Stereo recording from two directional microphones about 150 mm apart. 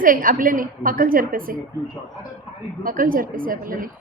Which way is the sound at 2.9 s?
65° right (ahead or behind).